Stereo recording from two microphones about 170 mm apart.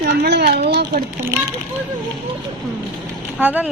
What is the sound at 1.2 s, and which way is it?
Speech, 20° right (ahead or behind).